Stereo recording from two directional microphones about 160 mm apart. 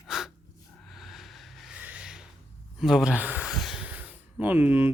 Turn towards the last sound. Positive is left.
turn(degrees=-10)  # may be behind; listen again after turning